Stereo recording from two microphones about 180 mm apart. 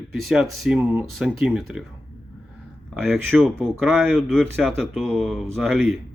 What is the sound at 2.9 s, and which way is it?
Speech, centre (ahead or behind).